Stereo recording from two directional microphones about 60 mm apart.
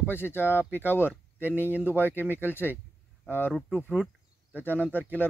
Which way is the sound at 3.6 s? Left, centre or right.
Centre.